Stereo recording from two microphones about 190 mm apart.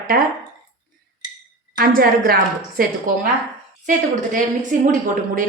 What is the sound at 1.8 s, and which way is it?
A woman's voice, 50° right (ahead or behind).